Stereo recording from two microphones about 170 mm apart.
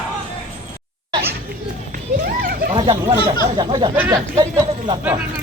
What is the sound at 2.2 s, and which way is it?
Children playing, 55° right (ahead or behind).